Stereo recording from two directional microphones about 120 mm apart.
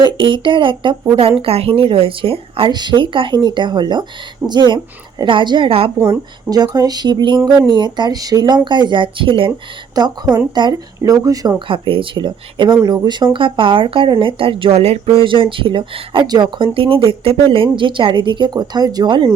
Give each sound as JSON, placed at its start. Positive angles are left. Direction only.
{"t": 0.0, "sound": "speech", "side_deg": -40}
{"t": 6.0, "sound": "a woman's voice", "side_deg": -25}
{"t": 10.0, "sound": "a woman's voice", "side_deg": -30}
{"t": 11.7, "sound": "a woman's voice", "side_deg": -45}